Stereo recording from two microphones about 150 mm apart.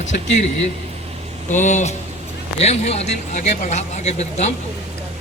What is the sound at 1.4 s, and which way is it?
Speech, 55° left (ahead or behind).